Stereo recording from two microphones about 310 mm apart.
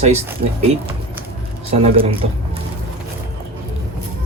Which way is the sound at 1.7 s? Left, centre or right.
Centre.